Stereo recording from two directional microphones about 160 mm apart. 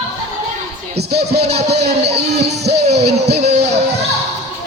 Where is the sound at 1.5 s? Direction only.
90° right.